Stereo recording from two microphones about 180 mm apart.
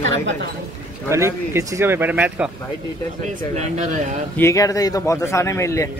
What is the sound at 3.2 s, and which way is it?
Speech, 40° right (ahead or behind).